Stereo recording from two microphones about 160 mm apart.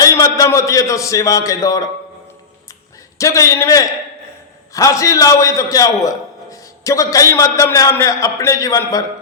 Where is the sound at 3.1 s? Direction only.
20° left (ahead or behind).